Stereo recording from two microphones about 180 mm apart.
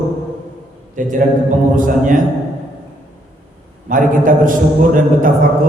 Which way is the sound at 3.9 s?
50° right (ahead or behind).